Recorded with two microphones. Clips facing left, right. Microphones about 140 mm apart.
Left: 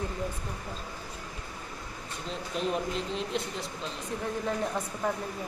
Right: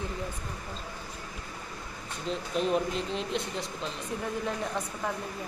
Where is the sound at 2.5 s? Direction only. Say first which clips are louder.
Right 2 dB; centre (ahead or behind).